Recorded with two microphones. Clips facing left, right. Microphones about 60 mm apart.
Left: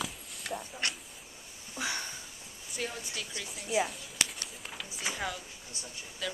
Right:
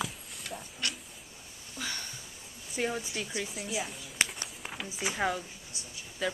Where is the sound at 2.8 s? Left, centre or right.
Right.